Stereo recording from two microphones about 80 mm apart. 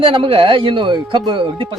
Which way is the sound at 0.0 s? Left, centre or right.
Right.